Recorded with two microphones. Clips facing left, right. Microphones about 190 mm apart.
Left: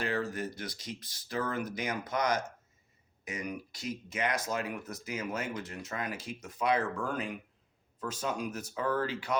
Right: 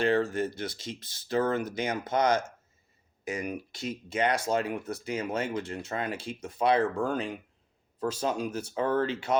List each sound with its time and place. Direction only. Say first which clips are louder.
0.0 s speech: right 7 dB; 25° right (ahead or behind)
3.7 s speech: right 4 dB; 25° right (ahead or behind)